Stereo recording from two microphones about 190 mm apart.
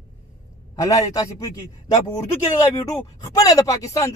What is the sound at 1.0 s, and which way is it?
Speech, 15° left (ahead or behind).